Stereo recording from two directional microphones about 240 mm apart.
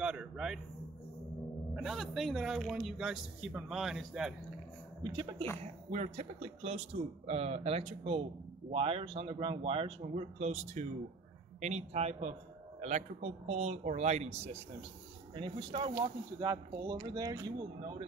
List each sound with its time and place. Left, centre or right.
0.0 s a sound: centre
1.8 s speech: centre
5.9 s speech: right